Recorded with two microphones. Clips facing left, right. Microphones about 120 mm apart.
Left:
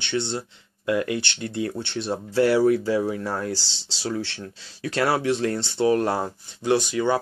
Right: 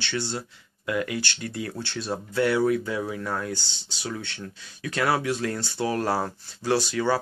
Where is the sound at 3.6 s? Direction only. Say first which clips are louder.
Left 1 dB; 90° left.